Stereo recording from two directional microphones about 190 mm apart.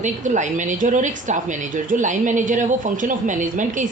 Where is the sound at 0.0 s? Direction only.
40° right (ahead or behind).